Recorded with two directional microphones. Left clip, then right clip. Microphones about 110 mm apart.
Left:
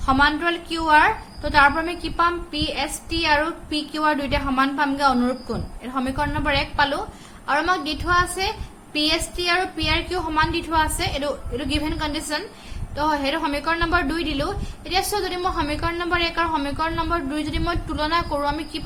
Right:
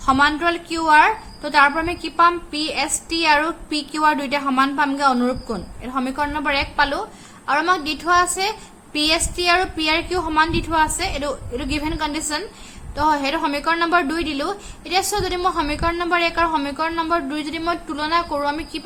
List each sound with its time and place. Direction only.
0.0 s a woman's voice: 30° right (ahead or behind)